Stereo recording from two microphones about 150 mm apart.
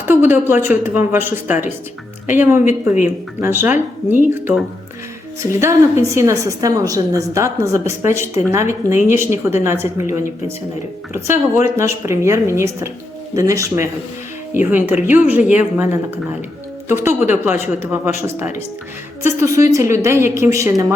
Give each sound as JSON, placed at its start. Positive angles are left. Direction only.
{"t": 0.0, "sound": "speech", "side_deg": -15}
{"t": 5.5, "sound": "a woman's voice", "side_deg": -20}